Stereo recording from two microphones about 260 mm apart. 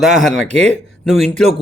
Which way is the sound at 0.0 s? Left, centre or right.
Centre.